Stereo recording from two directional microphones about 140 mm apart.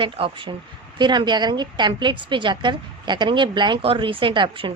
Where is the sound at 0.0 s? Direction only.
35° right (ahead or behind).